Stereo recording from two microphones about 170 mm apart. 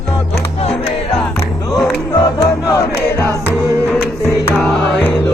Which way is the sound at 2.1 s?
20° left (ahead or behind).